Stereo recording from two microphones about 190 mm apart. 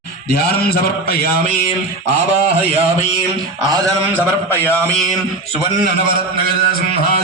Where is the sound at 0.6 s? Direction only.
55° left (ahead or behind).